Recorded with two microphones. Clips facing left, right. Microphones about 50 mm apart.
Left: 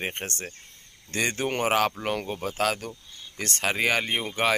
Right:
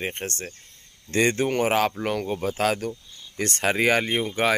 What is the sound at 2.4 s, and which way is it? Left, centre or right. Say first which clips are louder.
Speech: right 3 dB; centre.